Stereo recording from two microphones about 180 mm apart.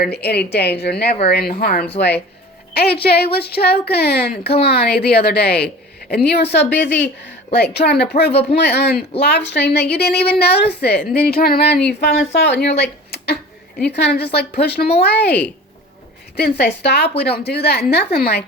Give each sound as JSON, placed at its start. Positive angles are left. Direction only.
{"t": 0.0, "sound": "a woman's voice", "side_deg": 65}
{"t": 2.0, "sound": "a woman's voice", "side_deg": 65}